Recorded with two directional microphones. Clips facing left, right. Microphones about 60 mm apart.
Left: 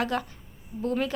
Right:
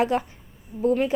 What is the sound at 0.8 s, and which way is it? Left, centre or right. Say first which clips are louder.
Speech: right 6 dB; centre.